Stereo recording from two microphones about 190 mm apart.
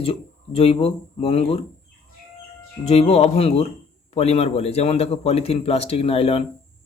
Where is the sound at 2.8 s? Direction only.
35° left (ahead or behind).